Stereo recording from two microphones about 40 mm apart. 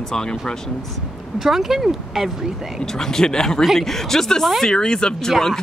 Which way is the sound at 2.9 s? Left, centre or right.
Centre.